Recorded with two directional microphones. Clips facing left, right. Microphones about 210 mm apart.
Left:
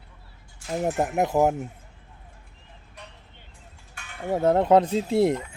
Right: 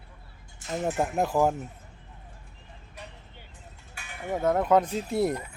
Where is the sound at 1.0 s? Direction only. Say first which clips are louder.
Left 3 dB; 15° left (ahead or behind).